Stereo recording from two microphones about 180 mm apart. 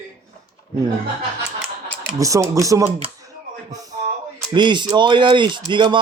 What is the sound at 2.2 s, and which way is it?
Speech, 20° right (ahead or behind).